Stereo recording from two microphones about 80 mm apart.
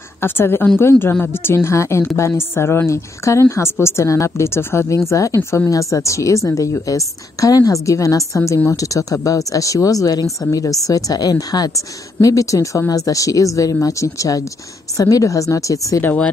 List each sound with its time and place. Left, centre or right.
0.2 s a woman's voice: left